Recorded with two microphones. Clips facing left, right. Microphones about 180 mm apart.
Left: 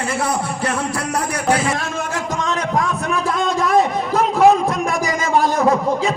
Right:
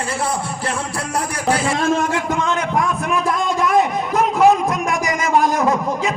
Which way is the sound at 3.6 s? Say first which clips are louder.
Even; 35° left (ahead or behind).